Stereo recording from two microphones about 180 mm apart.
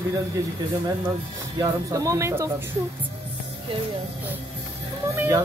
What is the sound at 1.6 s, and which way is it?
Speech, 20° right (ahead or behind).